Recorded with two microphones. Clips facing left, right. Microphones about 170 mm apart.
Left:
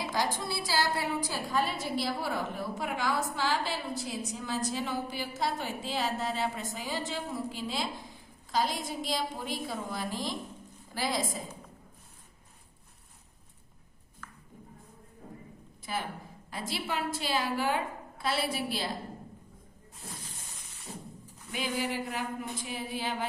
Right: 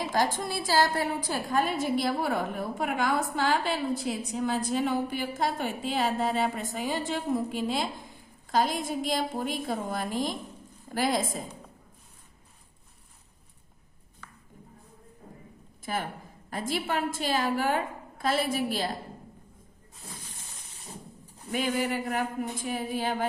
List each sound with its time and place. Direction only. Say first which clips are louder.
0.1 s a woman's voice: right 4 dB; 50° right (ahead or behind)
15.8 s a woman's voice: right 3 dB; 50° right (ahead or behind)
21.5 s a woman's voice: right 5 dB; 50° right (ahead or behind)